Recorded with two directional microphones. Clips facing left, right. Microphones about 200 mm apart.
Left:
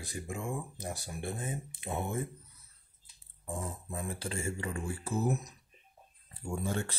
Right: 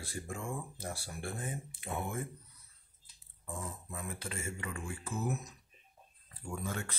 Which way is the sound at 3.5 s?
30° left (ahead or behind).